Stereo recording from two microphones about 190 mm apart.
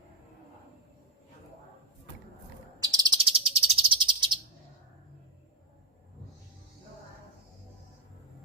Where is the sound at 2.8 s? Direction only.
20° right (ahead or behind).